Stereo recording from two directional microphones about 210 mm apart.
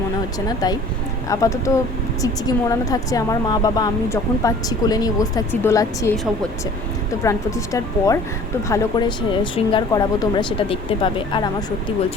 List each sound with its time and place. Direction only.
0.3 s a woman's voice: 20° left (ahead or behind)
7.2 s a woman's voice: 15° left (ahead or behind)